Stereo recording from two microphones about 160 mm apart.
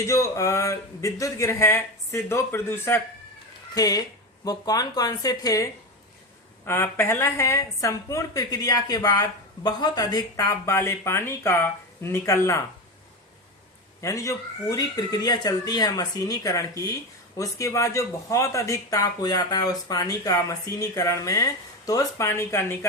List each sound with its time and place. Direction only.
0.1 s speech: 20° left (ahead or behind)
14.0 s speech: 20° left (ahead or behind)